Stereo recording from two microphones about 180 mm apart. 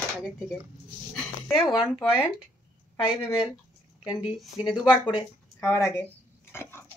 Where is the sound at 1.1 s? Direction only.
Centre (ahead or behind).